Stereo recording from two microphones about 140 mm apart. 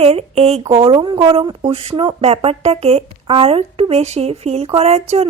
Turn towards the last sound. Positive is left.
turn(degrees=-45)  # may be behind; listen again after turning